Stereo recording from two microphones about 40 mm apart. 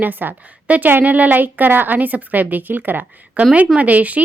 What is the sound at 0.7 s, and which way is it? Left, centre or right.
A woman's voice, right.